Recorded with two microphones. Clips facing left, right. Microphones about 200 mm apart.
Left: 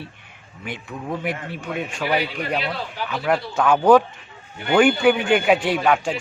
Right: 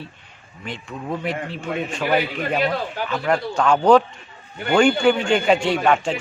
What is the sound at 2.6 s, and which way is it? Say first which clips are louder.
Speech: right 5 dB; 50° right (ahead or behind).